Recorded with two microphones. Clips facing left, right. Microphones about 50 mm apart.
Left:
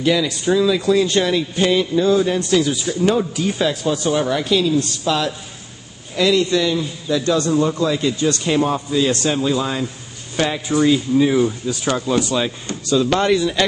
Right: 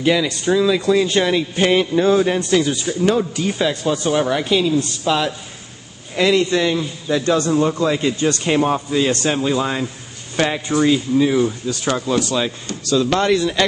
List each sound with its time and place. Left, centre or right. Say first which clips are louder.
0.0 s a man's voice: even; centre
1.6 s mantra: right 1 dB; right
2.3 s a man's voice: even; centre
4.1 s a man's voice: right 1 dB; centre
6.1 s mantra: even; right
7.4 s a man's voice: right 1 dB; right
11.1 s a man's voice: even; centre